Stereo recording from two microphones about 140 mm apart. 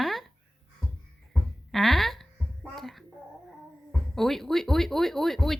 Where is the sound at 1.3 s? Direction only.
Centre (ahead or behind).